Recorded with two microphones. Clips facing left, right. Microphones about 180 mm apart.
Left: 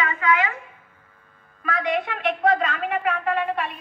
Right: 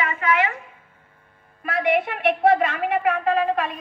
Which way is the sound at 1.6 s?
25° right (ahead or behind).